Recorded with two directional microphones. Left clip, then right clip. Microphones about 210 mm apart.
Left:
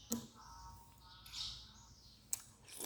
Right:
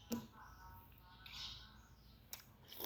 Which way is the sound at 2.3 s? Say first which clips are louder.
Left 5 dB; centre (ahead or behind).